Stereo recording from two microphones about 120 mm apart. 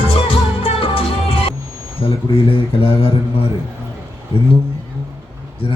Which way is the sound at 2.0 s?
50° left (ahead or behind).